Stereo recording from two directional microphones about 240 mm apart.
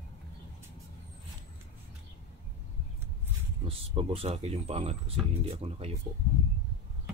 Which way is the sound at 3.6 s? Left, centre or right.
Right.